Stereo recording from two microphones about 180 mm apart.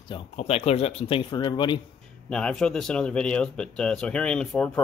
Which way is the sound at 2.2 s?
5° left (ahead or behind).